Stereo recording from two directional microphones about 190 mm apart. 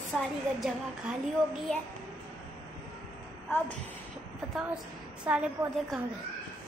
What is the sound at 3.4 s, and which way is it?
Speech, 10° left (ahead or behind).